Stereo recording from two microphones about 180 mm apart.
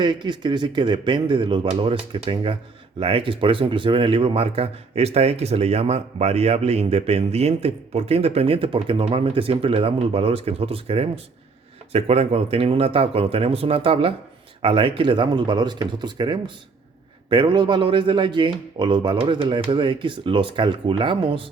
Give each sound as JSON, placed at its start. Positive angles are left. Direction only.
{"t": 0.0, "sound": "a man's voice", "side_deg": -25}